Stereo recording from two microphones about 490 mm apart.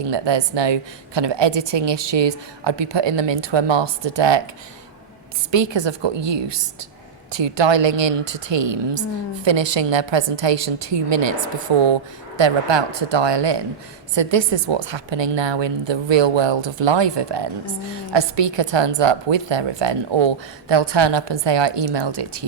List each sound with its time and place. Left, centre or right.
0.1 s a woman's voice: right
5.5 s a woman's voice: right